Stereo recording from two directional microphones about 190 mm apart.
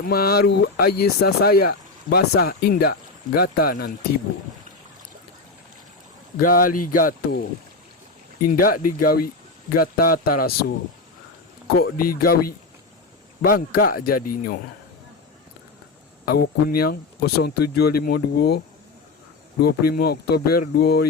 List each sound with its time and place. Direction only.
0.0 s speech: 55° left (ahead or behind)
6.4 s speech: 50° left (ahead or behind)
8.4 s speech: 50° left (ahead or behind)
11.8 s speech: 50° left (ahead or behind)
13.4 s speech: 50° left (ahead or behind)
16.2 s speech: 55° left (ahead or behind)
19.6 s speech: 55° left (ahead or behind)